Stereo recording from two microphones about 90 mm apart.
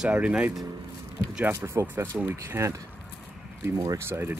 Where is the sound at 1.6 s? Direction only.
30° right (ahead or behind).